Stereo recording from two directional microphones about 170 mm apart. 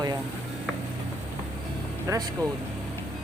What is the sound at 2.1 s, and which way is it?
Speech, 20° right (ahead or behind).